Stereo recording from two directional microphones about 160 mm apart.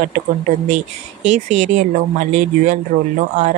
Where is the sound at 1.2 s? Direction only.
50° right (ahead or behind).